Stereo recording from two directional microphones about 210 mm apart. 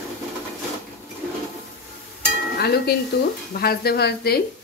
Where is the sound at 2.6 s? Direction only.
50° left (ahead or behind).